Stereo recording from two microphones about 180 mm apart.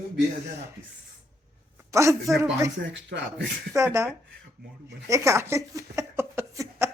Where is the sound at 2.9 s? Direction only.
80° right.